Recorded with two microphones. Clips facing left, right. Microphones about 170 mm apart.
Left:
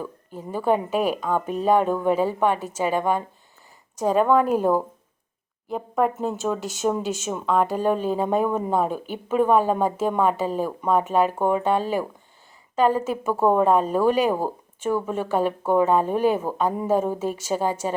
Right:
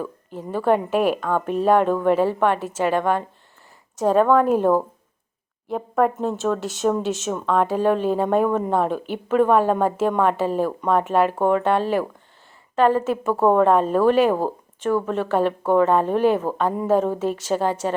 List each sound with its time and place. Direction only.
0.0 s speech: centre (ahead or behind)
12.8 s speech: centre (ahead or behind)